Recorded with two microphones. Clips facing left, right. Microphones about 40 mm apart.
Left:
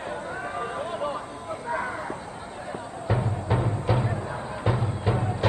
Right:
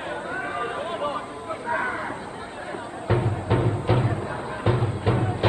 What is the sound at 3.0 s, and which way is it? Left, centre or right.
Music, right.